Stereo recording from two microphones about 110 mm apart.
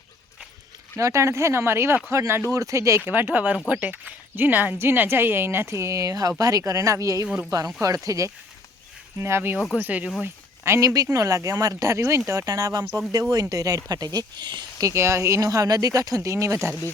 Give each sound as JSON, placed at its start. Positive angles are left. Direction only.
{"t": 0.9, "sound": "speech", "side_deg": -25}
{"t": 3.1, "sound": "speech", "side_deg": -15}
{"t": 9.6, "sound": "speech", "side_deg": 5}
{"t": 9.8, "sound": "speech", "side_deg": -15}
{"t": 14.8, "sound": "speech", "side_deg": -25}